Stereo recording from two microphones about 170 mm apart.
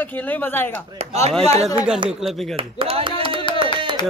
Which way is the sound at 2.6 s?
35° right (ahead or behind).